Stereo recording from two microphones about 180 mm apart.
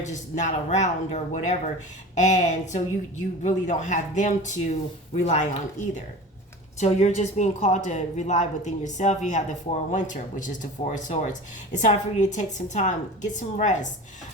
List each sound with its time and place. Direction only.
0.0 s a woman's voice: 40° left (ahead or behind)
6.7 s a woman's voice: 40° left (ahead or behind)